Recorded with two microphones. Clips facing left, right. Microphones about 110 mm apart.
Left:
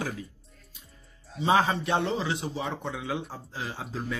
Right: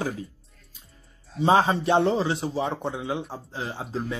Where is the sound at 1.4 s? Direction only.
35° right (ahead or behind).